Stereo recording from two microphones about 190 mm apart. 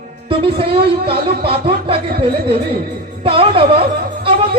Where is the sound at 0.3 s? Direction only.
30° right (ahead or behind).